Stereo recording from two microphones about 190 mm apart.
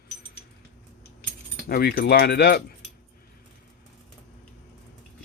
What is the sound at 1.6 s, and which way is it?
Speech, 55° left (ahead or behind).